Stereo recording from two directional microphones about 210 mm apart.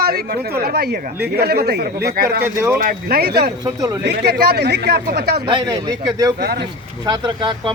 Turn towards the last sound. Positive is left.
turn(degrees=-20)  # may be behind; listen again after turning